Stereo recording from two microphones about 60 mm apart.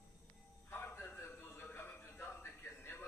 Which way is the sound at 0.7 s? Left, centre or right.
Left.